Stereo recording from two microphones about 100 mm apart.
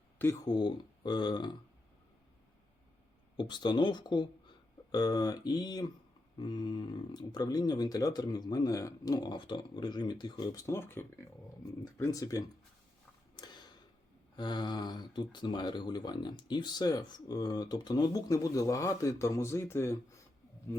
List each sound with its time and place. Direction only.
0.2 s speech: 25° left (ahead or behind)
0.4 s speech: 45° left (ahead or behind)
3.3 s speech: 50° left (ahead or behind)
13.4 s a sound: 45° left (ahead or behind)
14.3 s speech: 45° left (ahead or behind); by 20.0 s 25° left (ahead or behind)